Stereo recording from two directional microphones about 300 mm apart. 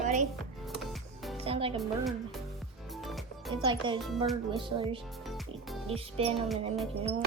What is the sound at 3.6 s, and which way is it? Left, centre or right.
A woman's voice, centre.